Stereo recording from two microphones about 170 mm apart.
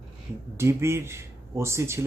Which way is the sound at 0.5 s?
15° right (ahead or behind).